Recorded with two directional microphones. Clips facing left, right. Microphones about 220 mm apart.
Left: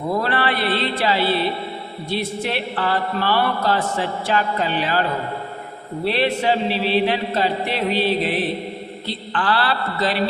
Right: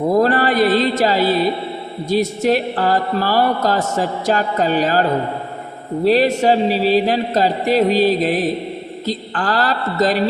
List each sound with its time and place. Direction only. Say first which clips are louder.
0.1 s speech: right 6 dB; 40° right (ahead or behind)
6.1 s speech: right 6 dB; 40° right (ahead or behind)